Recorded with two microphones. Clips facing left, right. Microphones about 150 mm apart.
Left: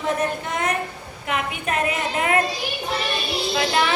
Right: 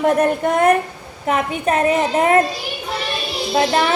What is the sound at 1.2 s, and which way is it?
A woman's voice, 35° right (ahead or behind).